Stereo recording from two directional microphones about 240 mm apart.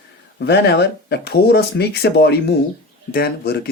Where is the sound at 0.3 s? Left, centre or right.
Left.